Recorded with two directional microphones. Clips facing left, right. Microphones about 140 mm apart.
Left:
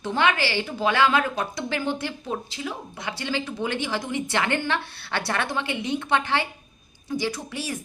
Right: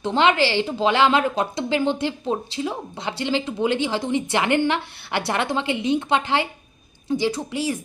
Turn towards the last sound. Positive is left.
turn(degrees=-20)  # may be behind; listen again after turning